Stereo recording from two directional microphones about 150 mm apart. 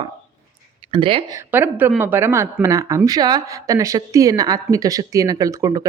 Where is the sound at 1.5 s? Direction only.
10° right (ahead or behind).